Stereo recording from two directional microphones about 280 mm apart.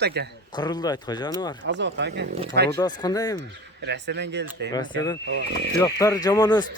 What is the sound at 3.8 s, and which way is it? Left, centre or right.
Speech, right.